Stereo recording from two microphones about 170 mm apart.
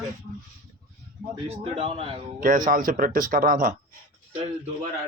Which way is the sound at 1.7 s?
35° right (ahead or behind).